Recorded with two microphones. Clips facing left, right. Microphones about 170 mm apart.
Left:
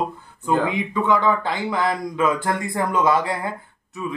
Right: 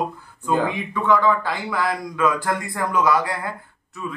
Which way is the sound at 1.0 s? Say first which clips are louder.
Right 2 dB; 20° left (ahead or behind).